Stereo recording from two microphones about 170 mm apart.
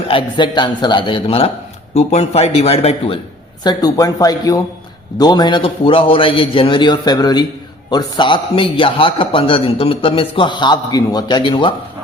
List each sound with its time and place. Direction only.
0.1 s a man's voice: 30° left (ahead or behind)
3.6 s a man's voice: 25° left (ahead or behind)